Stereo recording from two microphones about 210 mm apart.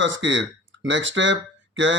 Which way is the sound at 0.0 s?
60° right (ahead or behind).